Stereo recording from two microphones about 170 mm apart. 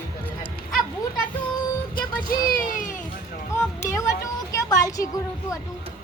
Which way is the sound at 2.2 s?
60° left (ahead or behind).